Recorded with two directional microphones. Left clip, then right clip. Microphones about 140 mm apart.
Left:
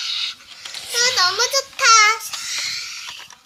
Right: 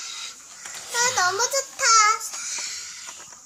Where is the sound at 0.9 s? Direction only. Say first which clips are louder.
Left 4 dB; 30° left (ahead or behind).